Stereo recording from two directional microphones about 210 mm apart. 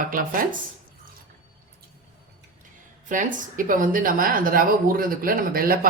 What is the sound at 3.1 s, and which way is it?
Speech, 40° right (ahead or behind).